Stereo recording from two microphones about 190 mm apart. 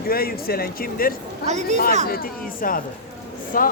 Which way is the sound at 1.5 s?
35° right (ahead or behind).